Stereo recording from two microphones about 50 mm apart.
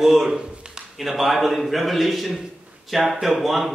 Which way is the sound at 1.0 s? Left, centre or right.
Centre.